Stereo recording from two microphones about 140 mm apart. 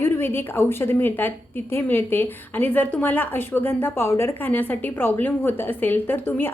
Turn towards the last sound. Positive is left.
turn(degrees=15)  # may be behind; listen again after turning